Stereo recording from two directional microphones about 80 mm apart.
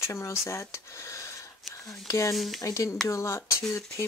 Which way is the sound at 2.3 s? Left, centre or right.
Centre.